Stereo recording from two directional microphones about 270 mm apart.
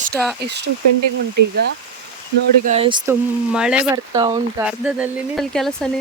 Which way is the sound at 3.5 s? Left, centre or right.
Centre.